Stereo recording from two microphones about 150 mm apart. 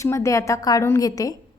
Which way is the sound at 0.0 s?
20° left (ahead or behind).